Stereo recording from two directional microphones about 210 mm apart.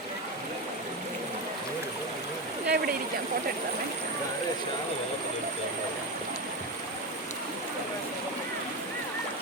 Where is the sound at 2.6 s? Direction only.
45° right (ahead or behind).